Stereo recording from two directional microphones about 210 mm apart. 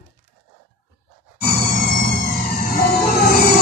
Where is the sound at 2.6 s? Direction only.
45° left (ahead or behind).